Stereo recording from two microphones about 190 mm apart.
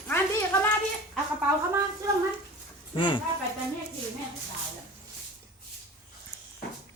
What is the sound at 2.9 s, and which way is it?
Speech, 25° left (ahead or behind).